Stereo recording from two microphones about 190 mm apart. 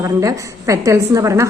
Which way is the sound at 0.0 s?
15° right (ahead or behind).